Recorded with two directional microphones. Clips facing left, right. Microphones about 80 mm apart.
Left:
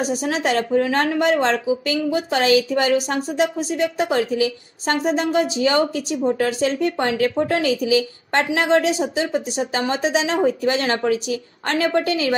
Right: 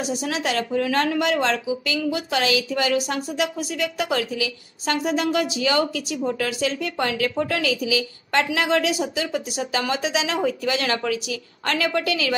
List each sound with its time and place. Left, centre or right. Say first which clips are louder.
0.0 s a woman's voice: left 4 dB; left